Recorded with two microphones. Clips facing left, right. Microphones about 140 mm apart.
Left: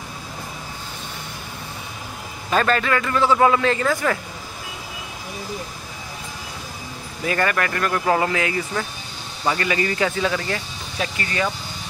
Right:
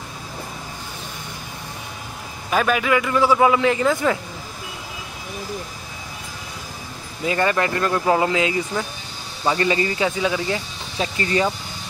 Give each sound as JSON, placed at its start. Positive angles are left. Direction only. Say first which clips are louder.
{"t": 2.5, "sound": "a man's voice", "louder": "right 1 dB", "side_deg": -10}
{"t": 7.2, "sound": "a man's voice", "louder": "right 2 dB", "side_deg": -20}
{"t": 11.0, "sound": "speech", "louder": "right 4 dB", "side_deg": -25}